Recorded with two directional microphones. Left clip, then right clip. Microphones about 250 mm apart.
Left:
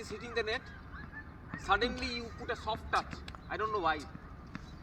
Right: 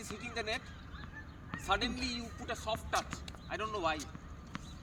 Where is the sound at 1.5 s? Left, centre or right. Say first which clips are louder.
Left 3 dB; right.